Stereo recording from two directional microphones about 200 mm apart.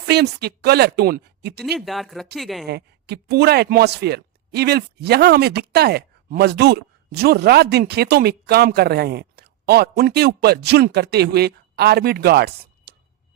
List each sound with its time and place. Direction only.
0.0 s speech: 55° right (ahead or behind)
1.6 s speech: centre (ahead or behind)
2.6 s speech: 55° right (ahead or behind)